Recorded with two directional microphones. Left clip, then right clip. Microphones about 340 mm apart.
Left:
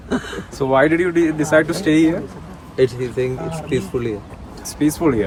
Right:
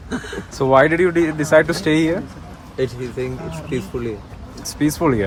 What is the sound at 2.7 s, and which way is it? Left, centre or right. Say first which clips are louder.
Speech: left 5 dB; left.